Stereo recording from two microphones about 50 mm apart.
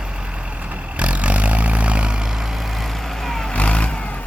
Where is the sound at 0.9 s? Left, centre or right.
Right; by 3.5 s centre.